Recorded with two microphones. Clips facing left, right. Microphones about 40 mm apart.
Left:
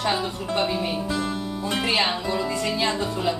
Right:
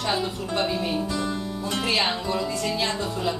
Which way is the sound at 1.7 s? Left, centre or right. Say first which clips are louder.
Left 1 dB; centre.